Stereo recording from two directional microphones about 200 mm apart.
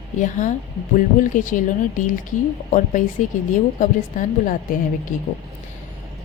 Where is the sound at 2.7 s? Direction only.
40° left (ahead or behind).